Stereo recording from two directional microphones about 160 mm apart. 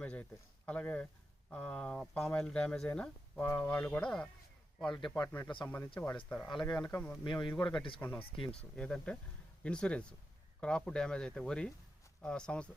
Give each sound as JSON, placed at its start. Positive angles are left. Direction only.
{"t": 0.0, "sound": "speech", "side_deg": 10}
{"t": 4.9, "sound": "a man's voice", "side_deg": 30}
{"t": 5.6, "sound": "speech", "side_deg": 10}
{"t": 7.3, "sound": "speech", "side_deg": 30}
{"t": 7.9, "sound": "speech", "side_deg": 10}
{"t": 8.2, "sound": "speech", "side_deg": 35}
{"t": 8.7, "sound": "speech", "side_deg": 5}